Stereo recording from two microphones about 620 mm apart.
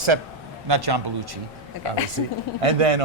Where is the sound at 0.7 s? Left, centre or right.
Right.